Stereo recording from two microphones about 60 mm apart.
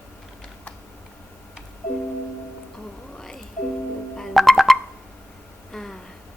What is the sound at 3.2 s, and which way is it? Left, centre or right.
Music, centre.